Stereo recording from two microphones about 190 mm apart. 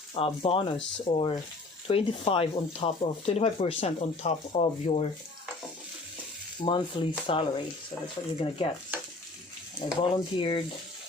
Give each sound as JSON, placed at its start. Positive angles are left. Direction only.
{"t": 0.1, "sound": "speech", "side_deg": 30}
{"t": 6.6, "sound": "speech", "side_deg": 25}
{"t": 10.0, "sound": "speech", "side_deg": 25}